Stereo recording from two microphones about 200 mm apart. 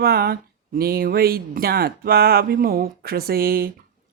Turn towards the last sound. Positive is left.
turn(degrees=-50)  # may be behind; listen again after turning